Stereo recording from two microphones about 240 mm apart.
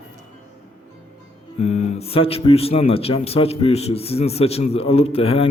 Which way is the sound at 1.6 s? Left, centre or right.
Left.